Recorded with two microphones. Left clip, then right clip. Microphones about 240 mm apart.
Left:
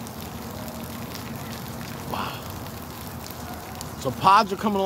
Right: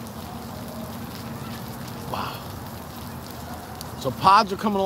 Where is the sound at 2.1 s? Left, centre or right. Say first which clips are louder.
Even; centre.